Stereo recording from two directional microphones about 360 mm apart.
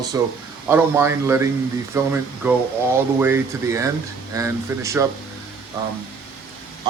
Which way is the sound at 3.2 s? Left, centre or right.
Centre.